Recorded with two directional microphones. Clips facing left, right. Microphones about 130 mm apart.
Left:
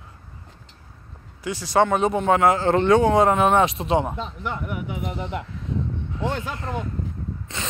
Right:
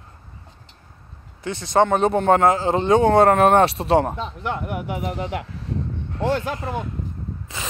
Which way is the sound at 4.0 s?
70° right (ahead or behind).